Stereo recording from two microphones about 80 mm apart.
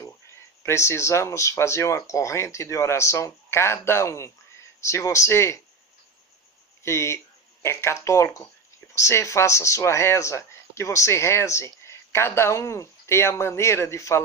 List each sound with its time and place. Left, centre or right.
0.0 s speech: left
6.8 s speech: left